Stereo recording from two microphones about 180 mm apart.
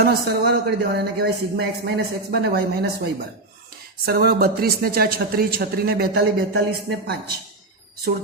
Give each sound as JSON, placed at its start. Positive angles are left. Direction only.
{"t": 0.0, "sound": "speech", "side_deg": -65}